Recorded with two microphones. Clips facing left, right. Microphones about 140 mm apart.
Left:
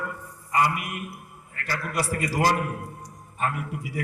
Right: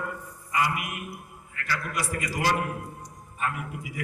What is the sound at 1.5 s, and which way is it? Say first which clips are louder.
A man's voice: left 2 dB; 40° left (ahead or behind).